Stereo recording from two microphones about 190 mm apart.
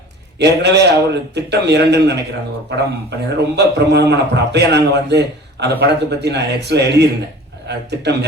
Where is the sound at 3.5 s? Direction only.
60° right (ahead or behind).